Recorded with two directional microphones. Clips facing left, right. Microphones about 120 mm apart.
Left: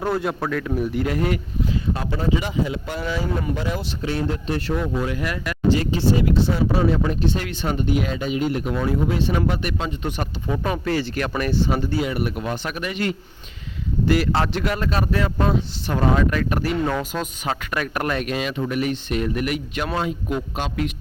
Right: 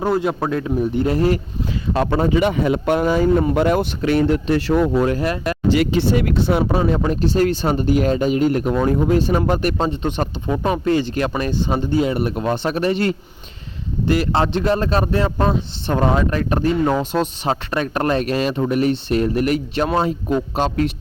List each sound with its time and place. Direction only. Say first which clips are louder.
0.0 s speech: right 4 dB; 20° right (ahead or behind)
1.9 s speech: right 8 dB; 70° right (ahead or behind)
5.2 s speech: right 6 dB; 30° right (ahead or behind)
5.7 s speech: right 4 dB; 85° right; by 6.8 s 60° right (ahead or behind)
6.9 s speech: right 4 dB; 40° right (ahead or behind)
9.9 s speech: right 5 dB; 25° right (ahead or behind)
14.2 s speech: right 3 dB; 20° right (ahead or behind); by 20.9 s 40° right (ahead or behind)